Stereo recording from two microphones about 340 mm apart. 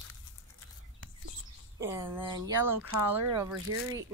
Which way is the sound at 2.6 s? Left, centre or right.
Right.